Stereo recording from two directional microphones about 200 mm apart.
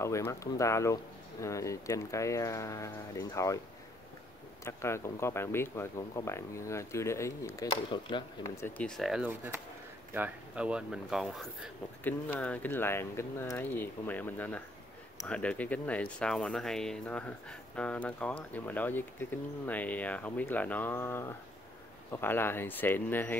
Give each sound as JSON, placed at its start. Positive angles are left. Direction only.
{"t": 0.0, "sound": "speech", "side_deg": 15}
{"t": 4.6, "sound": "speech", "side_deg": 15}